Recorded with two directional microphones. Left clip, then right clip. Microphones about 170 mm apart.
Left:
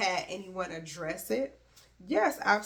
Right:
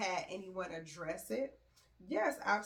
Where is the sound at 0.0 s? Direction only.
30° left (ahead or behind).